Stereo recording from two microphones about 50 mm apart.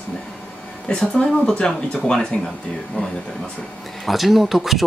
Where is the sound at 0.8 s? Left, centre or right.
Centre.